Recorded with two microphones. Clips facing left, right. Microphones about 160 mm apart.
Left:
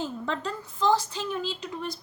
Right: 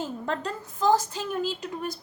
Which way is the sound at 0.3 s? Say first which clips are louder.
Right 1 dB; 45° right (ahead or behind).